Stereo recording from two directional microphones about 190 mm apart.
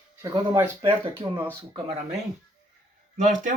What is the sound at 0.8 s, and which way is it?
Speech, 25° right (ahead or behind).